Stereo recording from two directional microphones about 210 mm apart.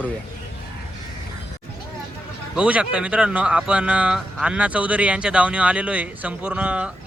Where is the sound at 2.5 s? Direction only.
5° right (ahead or behind).